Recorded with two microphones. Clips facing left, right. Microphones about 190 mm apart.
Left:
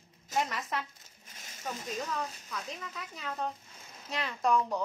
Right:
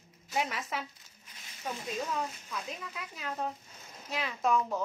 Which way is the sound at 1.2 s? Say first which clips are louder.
Even; 45° left (ahead or behind).